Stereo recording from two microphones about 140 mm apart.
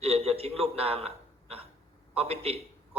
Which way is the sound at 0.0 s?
45° right (ahead or behind).